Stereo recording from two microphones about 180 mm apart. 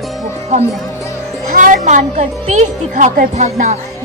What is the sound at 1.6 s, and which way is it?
Speech, 45° right (ahead or behind).